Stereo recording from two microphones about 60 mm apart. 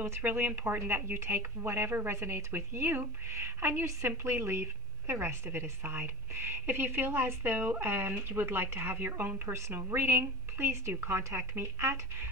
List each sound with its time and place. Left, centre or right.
0.2 s a woman's voice: right
9.8 s speech: right